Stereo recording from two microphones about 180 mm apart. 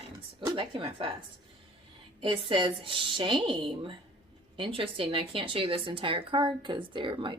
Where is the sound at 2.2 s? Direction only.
30° right (ahead or behind).